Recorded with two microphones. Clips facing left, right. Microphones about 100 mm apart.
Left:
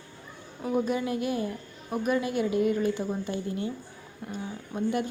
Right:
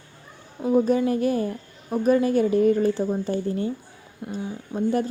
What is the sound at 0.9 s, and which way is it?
A woman's voice, 35° right (ahead or behind).